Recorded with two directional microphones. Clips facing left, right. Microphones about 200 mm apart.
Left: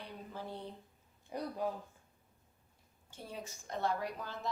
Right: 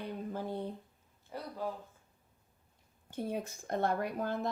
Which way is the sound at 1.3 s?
20° left (ahead or behind).